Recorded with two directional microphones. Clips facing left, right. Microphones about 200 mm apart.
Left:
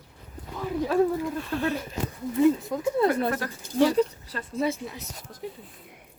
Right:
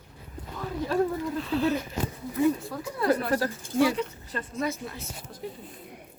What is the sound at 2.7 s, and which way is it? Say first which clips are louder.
Speech: left 6 dB; 15° left (ahead or behind).